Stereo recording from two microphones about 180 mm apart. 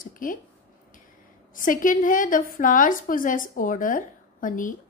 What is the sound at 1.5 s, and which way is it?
A woman's voice, 50° left (ahead or behind).